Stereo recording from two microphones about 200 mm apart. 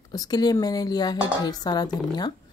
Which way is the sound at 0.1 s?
20° left (ahead or behind).